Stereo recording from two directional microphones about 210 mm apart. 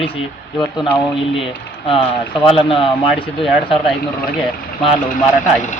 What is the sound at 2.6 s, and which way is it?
Speech, 25° left (ahead or behind).